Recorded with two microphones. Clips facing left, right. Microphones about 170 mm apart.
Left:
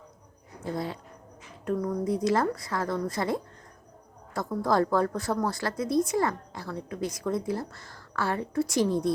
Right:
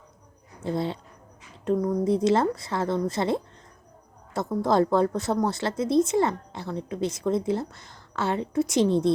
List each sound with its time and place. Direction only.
0.6 s speech: 25° right (ahead or behind)